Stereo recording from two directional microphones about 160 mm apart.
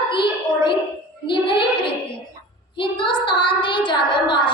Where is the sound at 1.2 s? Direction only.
30° left (ahead or behind).